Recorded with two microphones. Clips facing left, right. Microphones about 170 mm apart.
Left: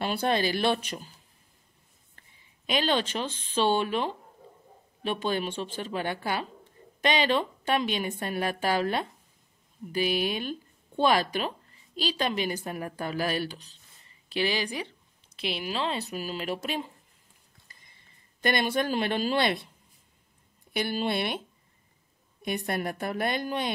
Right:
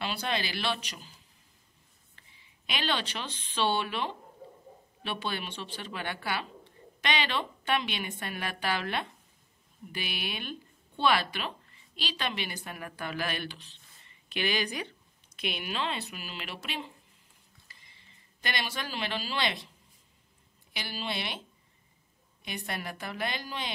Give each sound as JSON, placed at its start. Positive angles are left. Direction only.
{"t": 0.0, "sound": "a woman's voice", "side_deg": 50}
{"t": 2.1, "sound": "speech", "side_deg": 45}
{"t": 14.3, "sound": "speech", "side_deg": 30}
{"t": 18.4, "sound": "a woman's voice", "side_deg": 50}
{"t": 20.7, "sound": "a woman's voice", "side_deg": 50}
{"t": 22.4, "sound": "a woman's voice", "side_deg": 50}